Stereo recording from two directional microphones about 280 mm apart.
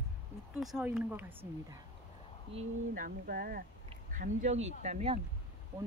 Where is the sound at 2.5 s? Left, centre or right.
Right.